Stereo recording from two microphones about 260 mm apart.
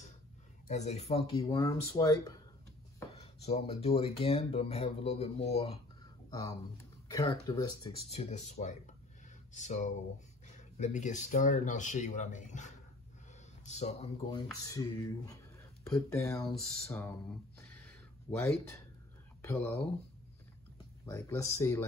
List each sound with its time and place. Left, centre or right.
0.7 s speech: left
1.4 s speech: centre
7.1 s speech: centre
17.6 s a sound: centre
19.4 s speech: centre
21.0 s speech: centre